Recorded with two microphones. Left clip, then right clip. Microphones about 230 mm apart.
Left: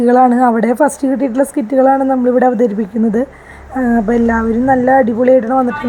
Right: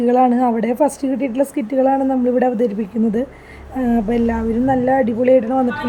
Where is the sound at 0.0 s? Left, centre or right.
Centre.